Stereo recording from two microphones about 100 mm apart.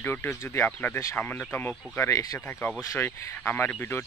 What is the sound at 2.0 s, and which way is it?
Speech, 35° left (ahead or behind).